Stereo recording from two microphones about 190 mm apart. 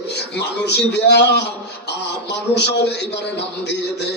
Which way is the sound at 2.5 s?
60° left (ahead or behind).